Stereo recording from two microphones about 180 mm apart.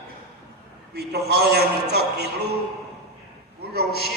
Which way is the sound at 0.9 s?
65° right (ahead or behind).